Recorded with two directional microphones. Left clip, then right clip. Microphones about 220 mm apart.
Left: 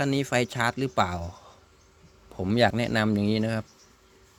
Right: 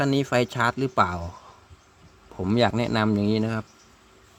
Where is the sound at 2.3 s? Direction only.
10° right (ahead or behind).